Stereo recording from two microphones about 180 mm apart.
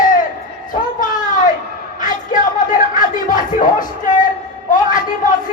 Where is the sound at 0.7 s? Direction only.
45° left (ahead or behind).